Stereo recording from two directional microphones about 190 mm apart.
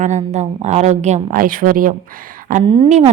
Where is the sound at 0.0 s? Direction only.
40° right (ahead or behind).